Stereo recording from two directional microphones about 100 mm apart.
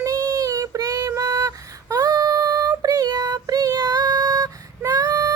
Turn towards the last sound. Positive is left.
turn(degrees=-35)  # may be behind; listen again after turning